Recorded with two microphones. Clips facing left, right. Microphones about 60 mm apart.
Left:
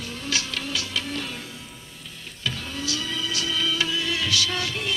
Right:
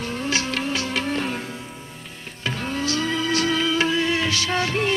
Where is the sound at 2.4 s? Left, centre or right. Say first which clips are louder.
Right 5 dB; right.